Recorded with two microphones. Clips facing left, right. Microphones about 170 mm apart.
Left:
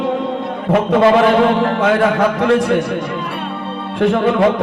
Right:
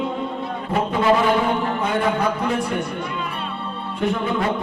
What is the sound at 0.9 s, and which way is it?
A man's voice, 85° left.